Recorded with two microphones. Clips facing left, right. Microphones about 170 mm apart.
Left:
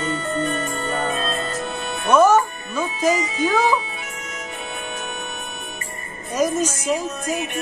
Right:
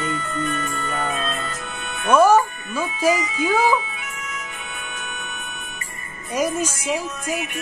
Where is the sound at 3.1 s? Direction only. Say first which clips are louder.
Left 1 dB; 30° left (ahead or behind).